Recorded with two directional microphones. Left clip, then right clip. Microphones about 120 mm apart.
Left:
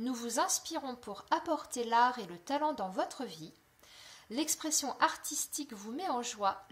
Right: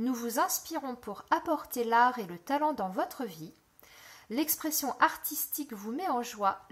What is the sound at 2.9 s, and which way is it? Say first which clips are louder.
Speech: right 3 dB; 30° right (ahead or behind).